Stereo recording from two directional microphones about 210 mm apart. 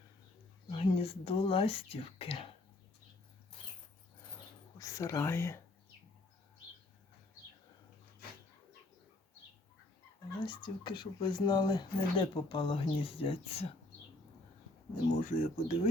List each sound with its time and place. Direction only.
0.7 s speech: 25° left (ahead or behind)
4.8 s speech: 15° left (ahead or behind)
10.4 s speech: 20° left (ahead or behind)
15.2 s speech: 40° left (ahead or behind)